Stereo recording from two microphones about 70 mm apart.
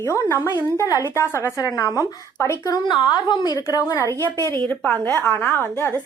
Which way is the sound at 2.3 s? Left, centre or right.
Left.